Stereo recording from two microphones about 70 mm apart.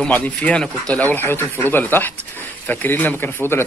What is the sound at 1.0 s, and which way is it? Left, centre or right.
Speech, left.